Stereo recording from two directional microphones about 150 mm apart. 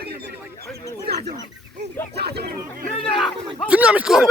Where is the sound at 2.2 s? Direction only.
90° right.